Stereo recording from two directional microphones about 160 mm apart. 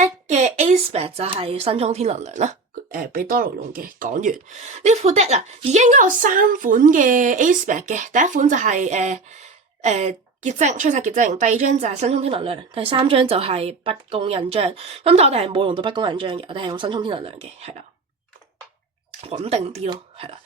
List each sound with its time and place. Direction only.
0.0 s a woman's voice: 45° right (ahead or behind)
2.9 s speech: 65° right (ahead or behind); by 17.8 s 40° right (ahead or behind)
19.4 s speech: 45° right (ahead or behind)